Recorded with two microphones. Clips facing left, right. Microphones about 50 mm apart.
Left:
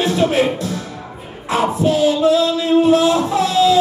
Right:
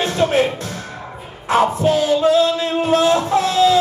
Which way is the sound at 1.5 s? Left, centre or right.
Right.